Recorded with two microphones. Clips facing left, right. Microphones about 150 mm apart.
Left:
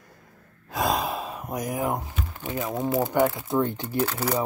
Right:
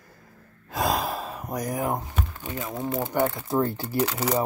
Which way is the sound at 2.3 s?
15° left (ahead or behind).